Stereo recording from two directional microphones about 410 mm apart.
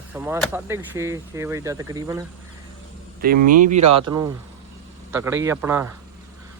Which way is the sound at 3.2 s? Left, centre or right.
Right.